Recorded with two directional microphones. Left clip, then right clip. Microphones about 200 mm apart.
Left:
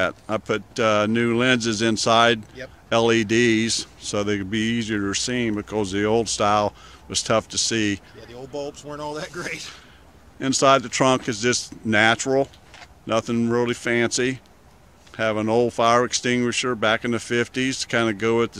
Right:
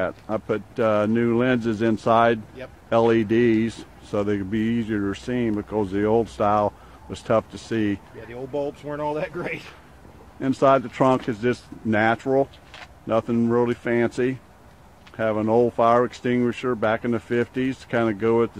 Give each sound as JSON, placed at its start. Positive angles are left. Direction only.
{"t": 0.0, "sound": "speech", "side_deg": 20}
{"t": 8.5, "sound": "speech", "side_deg": -30}
{"t": 10.6, "sound": "speech", "side_deg": 15}